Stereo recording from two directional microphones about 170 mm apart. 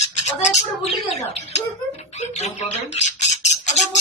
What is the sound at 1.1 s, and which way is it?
Speech, 40° left (ahead or behind).